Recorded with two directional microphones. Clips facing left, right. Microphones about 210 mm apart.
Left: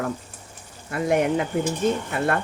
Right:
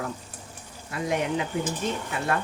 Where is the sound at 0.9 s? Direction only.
55° left (ahead or behind).